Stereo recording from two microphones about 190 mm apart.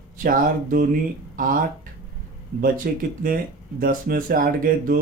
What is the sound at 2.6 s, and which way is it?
Speech, 50° right (ahead or behind).